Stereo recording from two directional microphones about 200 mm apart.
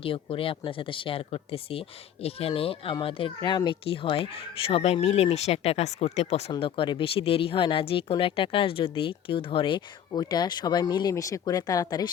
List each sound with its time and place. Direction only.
0.0 s speech: 25° left (ahead or behind)